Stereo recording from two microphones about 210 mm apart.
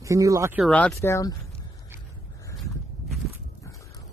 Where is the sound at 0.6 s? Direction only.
5° left (ahead or behind).